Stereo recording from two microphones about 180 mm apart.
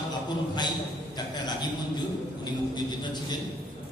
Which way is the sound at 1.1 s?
25° left (ahead or behind).